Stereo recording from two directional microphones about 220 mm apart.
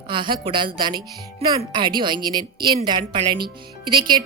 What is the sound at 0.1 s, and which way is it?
Speech, 20° right (ahead or behind).